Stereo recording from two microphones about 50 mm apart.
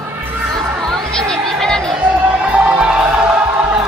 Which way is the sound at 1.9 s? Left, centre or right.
Right.